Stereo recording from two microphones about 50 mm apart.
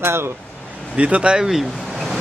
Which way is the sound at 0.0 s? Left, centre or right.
Right.